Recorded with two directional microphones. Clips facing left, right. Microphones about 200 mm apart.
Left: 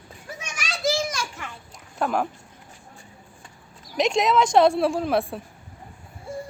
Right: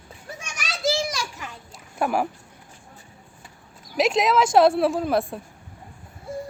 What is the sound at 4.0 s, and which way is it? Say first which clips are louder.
A woman's voice: even; 5° right (ahead or behind).